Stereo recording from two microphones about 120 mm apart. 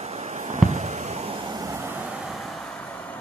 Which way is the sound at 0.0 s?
65° right (ahead or behind).